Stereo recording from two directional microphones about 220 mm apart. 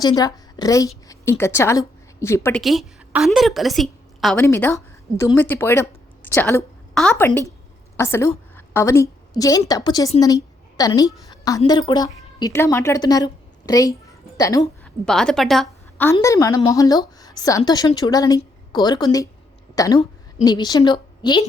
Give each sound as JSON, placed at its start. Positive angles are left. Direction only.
{"t": 0.0, "sound": "a woman's voice", "side_deg": 15}
{"t": 2.6, "sound": "a woman's voice", "side_deg": 0}
{"t": 4.4, "sound": "a woman's voice", "side_deg": 10}
{"t": 15.0, "sound": "a woman's voice", "side_deg": 5}
{"t": 16.0, "sound": "a woman's voice", "side_deg": 15}